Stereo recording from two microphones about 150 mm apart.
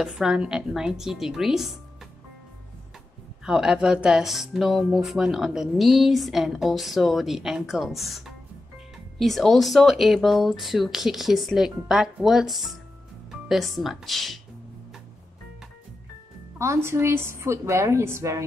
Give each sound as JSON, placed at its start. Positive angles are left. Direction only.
{"t": 0.0, "sound": "speech", "side_deg": -5}
{"t": 3.4, "sound": "speech", "side_deg": -5}
{"t": 16.5, "sound": "a woman's voice", "side_deg": -20}